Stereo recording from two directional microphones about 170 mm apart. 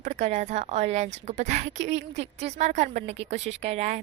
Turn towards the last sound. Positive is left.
turn(degrees=-40)  # may be behind; listen again after turning